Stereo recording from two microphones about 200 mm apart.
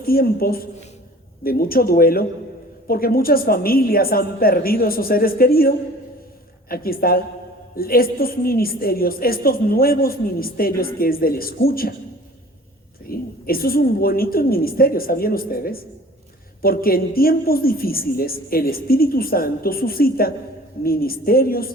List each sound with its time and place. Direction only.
0.0 s a man's voice: 50° left (ahead or behind)
13.1 s a man's voice: 50° left (ahead or behind)